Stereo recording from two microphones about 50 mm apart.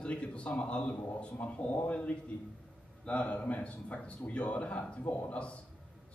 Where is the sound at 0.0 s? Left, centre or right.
Left.